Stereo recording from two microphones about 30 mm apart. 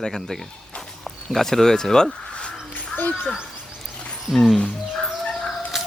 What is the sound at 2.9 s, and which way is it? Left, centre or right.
Speech, left.